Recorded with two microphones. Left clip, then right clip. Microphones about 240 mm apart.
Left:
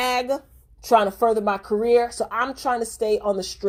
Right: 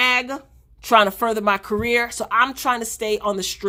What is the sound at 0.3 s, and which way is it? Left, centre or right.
A woman's voice, right.